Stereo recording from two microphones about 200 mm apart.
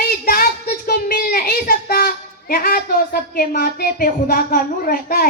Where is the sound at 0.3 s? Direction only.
45° left (ahead or behind).